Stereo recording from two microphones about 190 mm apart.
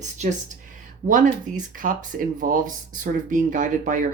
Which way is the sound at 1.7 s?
45° right (ahead or behind).